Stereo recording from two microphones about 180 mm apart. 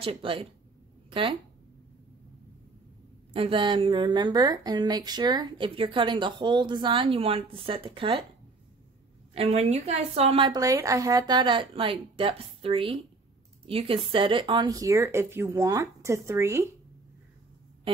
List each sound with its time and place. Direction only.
0.0 s a woman's voice: 30° right (ahead or behind)
3.3 s a woman's voice: 30° right (ahead or behind)
9.3 s a woman's voice: 35° right (ahead or behind); by 16.6 s 15° right (ahead or behind)